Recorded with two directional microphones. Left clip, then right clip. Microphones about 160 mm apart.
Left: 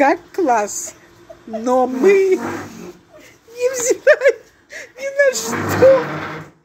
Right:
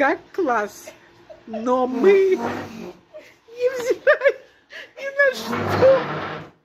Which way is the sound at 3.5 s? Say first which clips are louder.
Left 4 dB; 20° left (ahead or behind).